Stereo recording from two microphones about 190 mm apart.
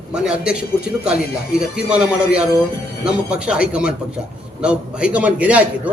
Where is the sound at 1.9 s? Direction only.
5° right (ahead or behind).